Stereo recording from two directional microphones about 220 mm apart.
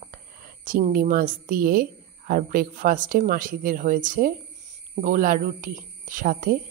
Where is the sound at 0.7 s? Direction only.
40° right (ahead or behind).